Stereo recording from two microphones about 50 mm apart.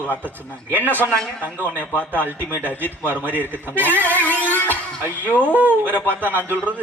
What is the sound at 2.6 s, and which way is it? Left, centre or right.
Speech, left.